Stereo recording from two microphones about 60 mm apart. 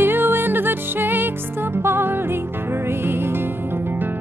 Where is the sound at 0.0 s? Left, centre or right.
Right.